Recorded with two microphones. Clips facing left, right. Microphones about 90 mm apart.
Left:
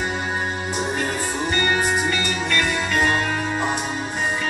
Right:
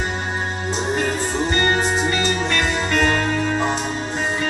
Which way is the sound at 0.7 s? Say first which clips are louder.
Right 6 dB; 25° right (ahead or behind).